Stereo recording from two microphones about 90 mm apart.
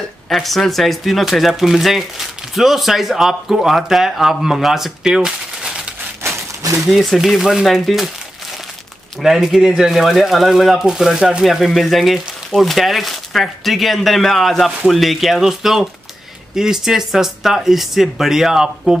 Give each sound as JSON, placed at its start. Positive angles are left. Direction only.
{"t": 0.3, "sound": "speech", "side_deg": 0}
{"t": 6.2, "sound": "a sound", "side_deg": -30}
{"t": 6.9, "sound": "speech", "side_deg": 0}
{"t": 9.2, "sound": "speech", "side_deg": 0}